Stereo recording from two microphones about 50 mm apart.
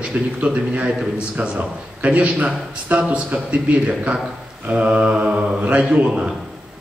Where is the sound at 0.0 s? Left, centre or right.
Right.